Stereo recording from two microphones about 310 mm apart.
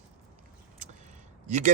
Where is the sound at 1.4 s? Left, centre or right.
Right.